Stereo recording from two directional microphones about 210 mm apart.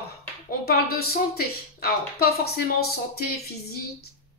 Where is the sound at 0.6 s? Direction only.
45° left (ahead or behind).